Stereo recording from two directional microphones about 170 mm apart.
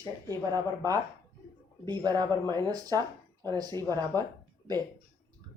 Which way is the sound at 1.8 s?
25° right (ahead or behind).